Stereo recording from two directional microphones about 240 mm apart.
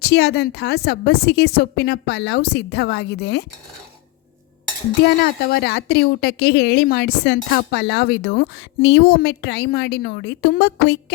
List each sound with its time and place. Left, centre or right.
0.0 s speech: left
5.2 s speech: left